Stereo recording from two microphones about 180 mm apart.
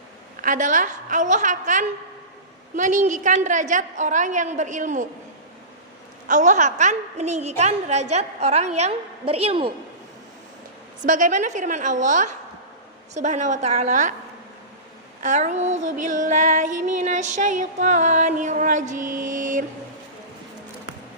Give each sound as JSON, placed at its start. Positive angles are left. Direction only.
{"t": 0.4, "sound": "female singing", "side_deg": -45}
{"t": 6.2, "sound": "a woman's voice", "side_deg": -45}
{"t": 11.0, "sound": "female singing", "side_deg": -45}
{"t": 13.1, "sound": "a woman's voice", "side_deg": -40}
{"t": 15.2, "sound": "female singing", "side_deg": -40}